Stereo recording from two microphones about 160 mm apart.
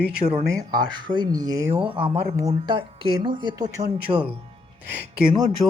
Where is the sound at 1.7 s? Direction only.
35° right (ahead or behind).